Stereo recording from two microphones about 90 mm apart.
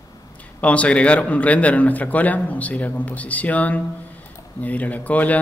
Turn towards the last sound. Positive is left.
turn(degrees=15)  # may be behind; listen again after turning